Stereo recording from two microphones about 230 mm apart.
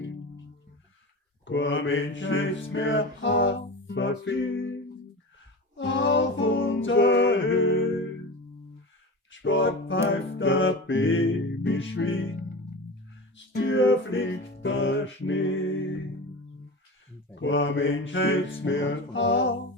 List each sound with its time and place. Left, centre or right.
1.5 s music: left
9.3 s speech: left
10.1 s music: left
17.4 s music: left